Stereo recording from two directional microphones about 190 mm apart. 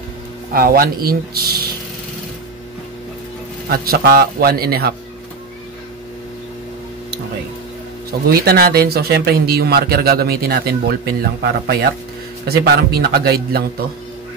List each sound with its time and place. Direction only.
0.5 s a man's voice: 50° right (ahead or behind)
3.6 s a man's voice: 50° right (ahead or behind)
8.3 s speech: 55° right (ahead or behind)